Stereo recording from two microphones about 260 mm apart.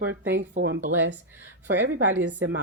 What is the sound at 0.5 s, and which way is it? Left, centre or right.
Speech, right.